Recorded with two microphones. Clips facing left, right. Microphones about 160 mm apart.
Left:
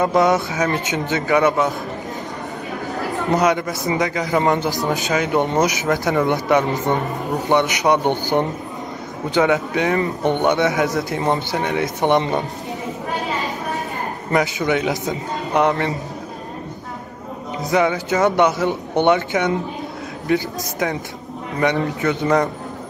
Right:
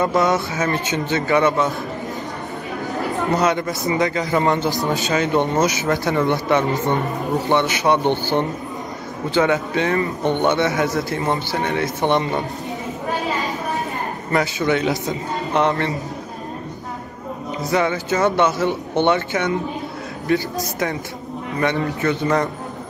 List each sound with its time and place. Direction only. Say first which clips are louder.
0.0 s a man's voice: left 2 dB; 20° left (ahead or behind)
3.3 s a man's voice: left 2 dB; 15° left (ahead or behind)
14.3 s speech: left 1 dB; 20° left (ahead or behind)
17.6 s speech: left 2 dB; 15° left (ahead or behind)
21.5 s speech: left 2 dB; 20° left (ahead or behind)